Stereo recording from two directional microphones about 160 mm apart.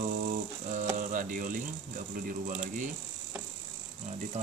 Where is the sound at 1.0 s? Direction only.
55° right (ahead or behind).